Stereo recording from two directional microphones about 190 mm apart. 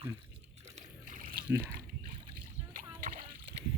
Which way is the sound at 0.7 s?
45° right (ahead or behind).